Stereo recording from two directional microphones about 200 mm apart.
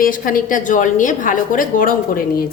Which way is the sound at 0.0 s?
45° left (ahead or behind).